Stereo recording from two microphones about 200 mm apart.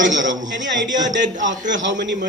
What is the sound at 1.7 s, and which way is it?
Speech, 65° right (ahead or behind).